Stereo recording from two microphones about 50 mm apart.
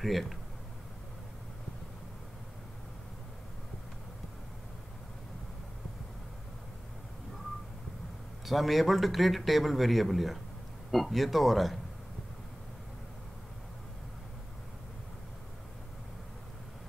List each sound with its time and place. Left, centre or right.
0.0 s speech: centre
8.5 s speech: centre